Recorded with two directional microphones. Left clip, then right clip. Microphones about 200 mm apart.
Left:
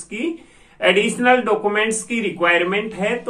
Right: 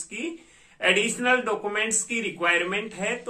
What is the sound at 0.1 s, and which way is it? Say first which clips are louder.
A man's voice: left 9 dB; 5° right (ahead or behind).